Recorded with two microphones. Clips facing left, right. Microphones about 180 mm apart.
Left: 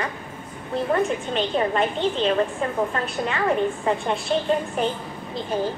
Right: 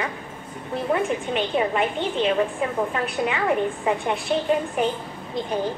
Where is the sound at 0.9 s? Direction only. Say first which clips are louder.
Even; 10° right (ahead or behind).